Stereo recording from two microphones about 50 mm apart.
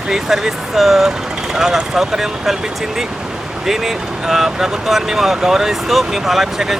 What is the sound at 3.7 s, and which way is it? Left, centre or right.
Speech, centre.